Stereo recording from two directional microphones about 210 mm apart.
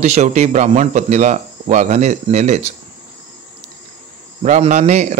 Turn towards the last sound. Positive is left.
turn(degrees=-35)  # may be behind; listen again after turning